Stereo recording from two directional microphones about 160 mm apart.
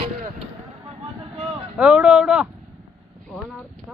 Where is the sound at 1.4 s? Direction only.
5° right (ahead or behind).